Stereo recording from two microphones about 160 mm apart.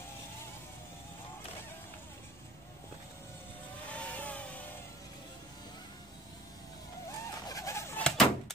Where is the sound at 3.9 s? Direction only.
10° left (ahead or behind).